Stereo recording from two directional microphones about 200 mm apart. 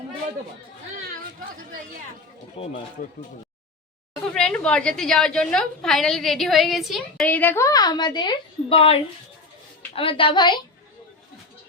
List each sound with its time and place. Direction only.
2.6 s a woman's voice: 30° left (ahead or behind)
3.0 s speech: 40° left (ahead or behind)
4.4 s a woman's voice: 5° left (ahead or behind); by 10.6 s 20° left (ahead or behind)